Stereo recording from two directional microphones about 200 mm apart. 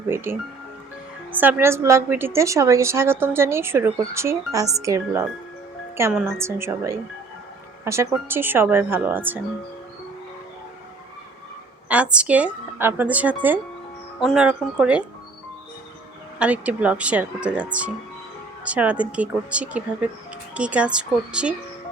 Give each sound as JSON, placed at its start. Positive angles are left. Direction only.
{"t": 0.3, "sound": "a woman's voice", "side_deg": -10}
{"t": 8.1, "sound": "a woman's voice", "side_deg": -10}
{"t": 11.9, "sound": "a woman's voice", "side_deg": -5}
{"t": 16.4, "sound": "a woman's voice", "side_deg": -5}